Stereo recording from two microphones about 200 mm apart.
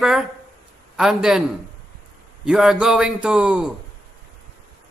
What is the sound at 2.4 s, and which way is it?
A man's voice, 5° right (ahead or behind).